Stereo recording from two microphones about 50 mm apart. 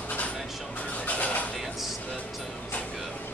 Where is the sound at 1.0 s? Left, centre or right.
Left.